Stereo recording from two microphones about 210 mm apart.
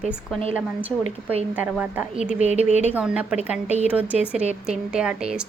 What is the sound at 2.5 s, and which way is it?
Speech, 30° right (ahead or behind).